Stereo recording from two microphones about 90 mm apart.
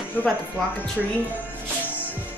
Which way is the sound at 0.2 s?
20° left (ahead or behind).